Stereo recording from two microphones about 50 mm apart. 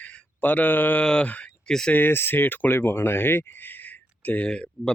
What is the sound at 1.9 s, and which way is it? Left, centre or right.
Speech, left.